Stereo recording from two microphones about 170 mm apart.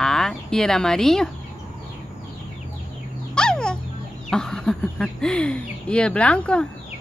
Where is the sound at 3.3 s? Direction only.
5° left (ahead or behind).